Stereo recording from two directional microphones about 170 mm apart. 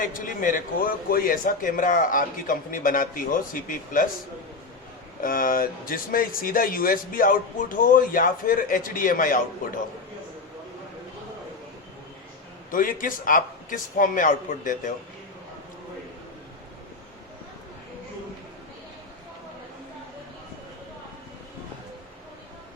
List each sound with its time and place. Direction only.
0.0 s a man's voice: 55° left (ahead or behind)
5.2 s speech: 55° left (ahead or behind)
12.7 s a man's voice: 55° left (ahead or behind)